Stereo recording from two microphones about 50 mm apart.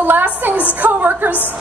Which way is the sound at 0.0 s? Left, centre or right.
Right.